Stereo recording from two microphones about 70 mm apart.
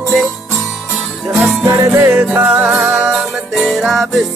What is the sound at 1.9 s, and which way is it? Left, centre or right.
Music, right.